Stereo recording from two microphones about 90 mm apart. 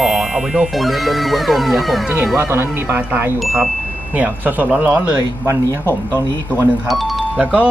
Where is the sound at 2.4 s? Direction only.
25° right (ahead or behind).